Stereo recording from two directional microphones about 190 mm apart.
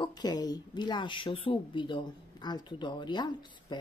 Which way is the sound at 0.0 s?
20° left (ahead or behind).